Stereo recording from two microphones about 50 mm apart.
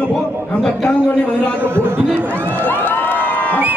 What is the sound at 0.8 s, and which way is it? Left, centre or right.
Speech, left.